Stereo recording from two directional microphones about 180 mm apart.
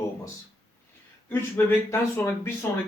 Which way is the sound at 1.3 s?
15° left (ahead or behind).